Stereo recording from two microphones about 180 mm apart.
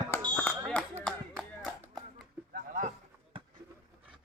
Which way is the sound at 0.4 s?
5° left (ahead or behind).